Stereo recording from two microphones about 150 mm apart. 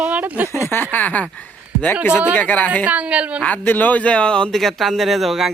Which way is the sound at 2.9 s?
10° right (ahead or behind).